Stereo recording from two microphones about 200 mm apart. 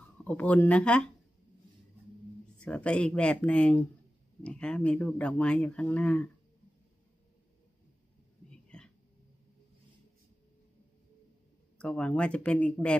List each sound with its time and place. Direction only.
0.2 s speech: 5° left (ahead or behind)
2.6 s speech: 5° left (ahead or behind)
8.5 s a sound: 5° left (ahead or behind)
11.8 s speech: 5° left (ahead or behind)